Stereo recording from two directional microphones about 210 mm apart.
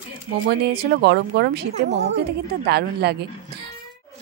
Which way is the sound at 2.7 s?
50° right (ahead or behind).